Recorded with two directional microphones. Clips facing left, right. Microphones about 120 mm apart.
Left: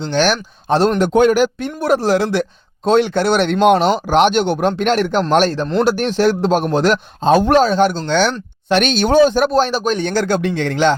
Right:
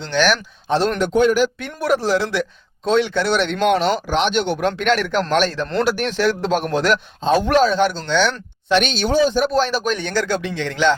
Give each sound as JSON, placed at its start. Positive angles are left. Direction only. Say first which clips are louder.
{"t": 0.0, "sound": "a man's voice", "louder": "left 2 dB", "side_deg": 35}
{"t": 0.9, "sound": "a man's voice", "louder": "left 2 dB", "side_deg": 50}
{"t": 1.5, "sound": "a man's voice", "louder": "left 3 dB", "side_deg": 30}
{"t": 7.2, "sound": "a man's voice", "louder": "left 4 dB", "side_deg": 45}
{"t": 9.5, "sound": "a man's voice", "louder": "left 3 dB", "side_deg": 35}